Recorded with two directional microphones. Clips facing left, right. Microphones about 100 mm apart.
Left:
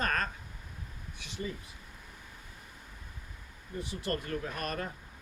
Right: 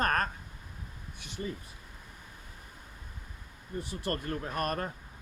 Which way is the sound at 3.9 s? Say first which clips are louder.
Even; 45° right (ahead or behind).